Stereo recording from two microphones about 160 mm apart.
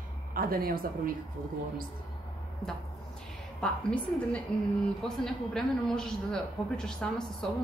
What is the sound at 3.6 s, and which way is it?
A man's voice, 5° left (ahead or behind).